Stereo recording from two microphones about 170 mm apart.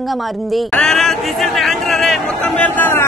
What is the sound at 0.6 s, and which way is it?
A man's voice, centre (ahead or behind).